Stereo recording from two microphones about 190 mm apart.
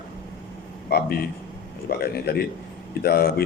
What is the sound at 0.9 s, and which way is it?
A man's voice, 55° left (ahead or behind).